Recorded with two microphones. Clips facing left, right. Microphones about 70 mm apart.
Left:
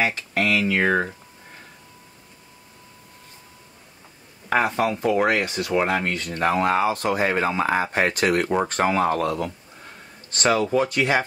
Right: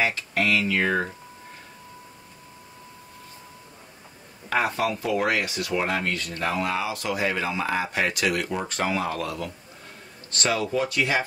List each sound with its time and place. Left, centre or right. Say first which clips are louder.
0.3 s speech: left 2 dB; centre
0.7 s speech: left 3 dB; centre
5.0 s speech: left 5 dB; left
6.6 s speech: left 7 dB; left
10.3 s speech: left 5 dB; left